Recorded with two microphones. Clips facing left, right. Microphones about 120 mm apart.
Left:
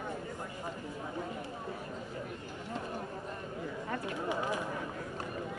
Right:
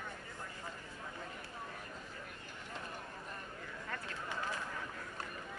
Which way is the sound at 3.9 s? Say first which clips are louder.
Left 8 dB; 15° left (ahead or behind).